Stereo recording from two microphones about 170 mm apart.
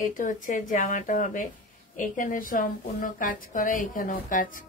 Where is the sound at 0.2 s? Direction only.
50° left (ahead or behind).